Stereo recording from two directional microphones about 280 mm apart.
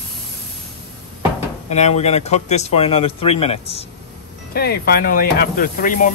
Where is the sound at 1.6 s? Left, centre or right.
Left.